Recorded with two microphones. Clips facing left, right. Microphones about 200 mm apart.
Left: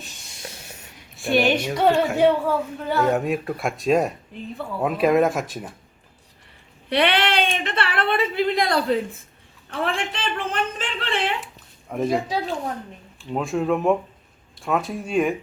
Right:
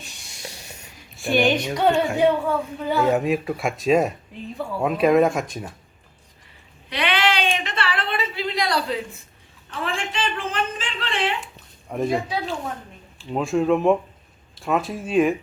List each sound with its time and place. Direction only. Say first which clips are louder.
0.0 s speech: even; centre (ahead or behind)
6.9 s a woman's voice: left 3 dB; 60° left (ahead or behind)
11.9 s speech: left 1 dB; centre (ahead or behind)